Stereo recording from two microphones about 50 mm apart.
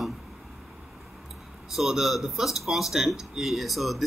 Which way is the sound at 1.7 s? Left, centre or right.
Centre.